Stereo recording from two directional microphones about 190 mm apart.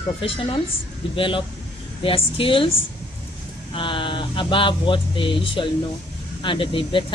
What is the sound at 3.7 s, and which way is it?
Speech, 25° left (ahead or behind).